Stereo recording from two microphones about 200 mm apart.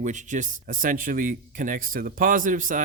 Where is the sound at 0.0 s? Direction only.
40° right (ahead or behind).